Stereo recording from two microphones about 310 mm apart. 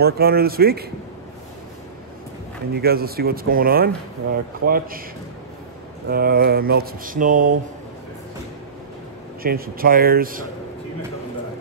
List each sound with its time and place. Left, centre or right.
0.0 s speech: right
2.7 s speech: right
6.0 s speech: right
9.4 s speech: right